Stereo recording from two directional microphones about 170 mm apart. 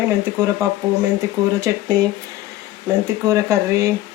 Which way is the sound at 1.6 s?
20° right (ahead or behind).